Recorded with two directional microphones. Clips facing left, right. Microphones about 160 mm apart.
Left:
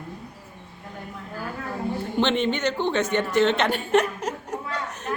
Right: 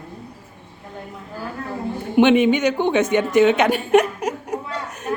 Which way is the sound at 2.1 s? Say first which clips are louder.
Right 10 dB; 10° right (ahead or behind).